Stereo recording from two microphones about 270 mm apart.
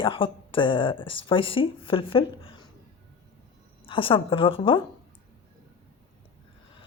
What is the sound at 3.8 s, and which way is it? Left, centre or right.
Speech, centre.